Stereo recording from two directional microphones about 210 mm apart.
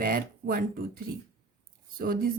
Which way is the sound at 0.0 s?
45° right (ahead or behind).